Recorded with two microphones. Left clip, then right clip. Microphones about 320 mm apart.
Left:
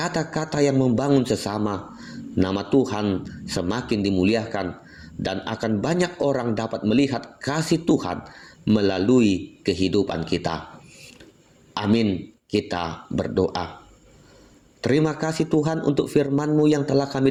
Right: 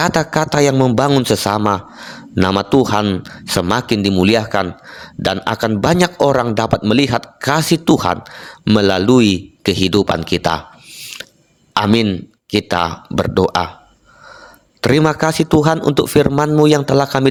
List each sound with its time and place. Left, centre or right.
0.0 s a man's voice: right
14.8 s a man's voice: right